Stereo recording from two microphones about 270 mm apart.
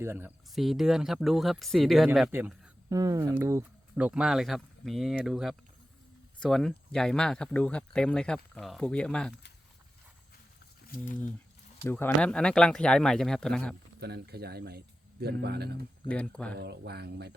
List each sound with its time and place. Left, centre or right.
0.0 s speech: centre
10.9 s speech: left
11.9 s speech: centre
14.0 s speech: right
16.0 s speech: centre
16.6 s speech: right